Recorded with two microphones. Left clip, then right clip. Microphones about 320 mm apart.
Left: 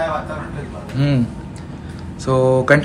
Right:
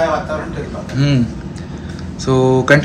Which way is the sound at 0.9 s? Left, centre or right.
Centre.